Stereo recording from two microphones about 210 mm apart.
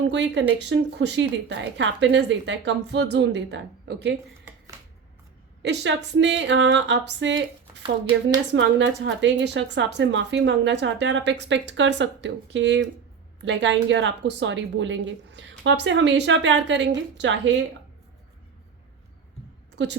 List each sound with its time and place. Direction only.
0.1 s a woman's voice: 60° right (ahead or behind)
5.6 s a woman's voice: 55° right (ahead or behind)
8.5 s a woman's voice: 55° right (ahead or behind)
19.7 s a woman's voice: 55° right (ahead or behind)